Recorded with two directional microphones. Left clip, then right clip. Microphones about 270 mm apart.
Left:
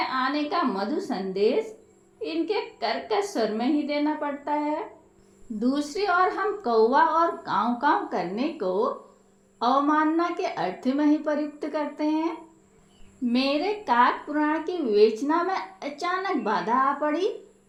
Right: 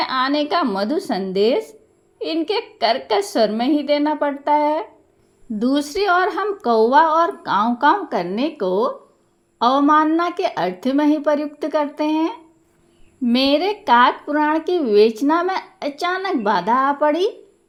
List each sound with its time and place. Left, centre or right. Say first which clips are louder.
0.0 s speech: right 7 dB; right